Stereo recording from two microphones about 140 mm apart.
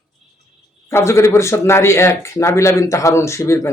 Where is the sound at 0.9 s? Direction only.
20° left (ahead or behind).